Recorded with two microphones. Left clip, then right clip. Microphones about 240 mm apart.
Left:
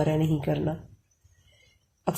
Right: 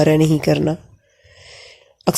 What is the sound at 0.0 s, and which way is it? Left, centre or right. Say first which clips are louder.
Speech: right 12 dB; right.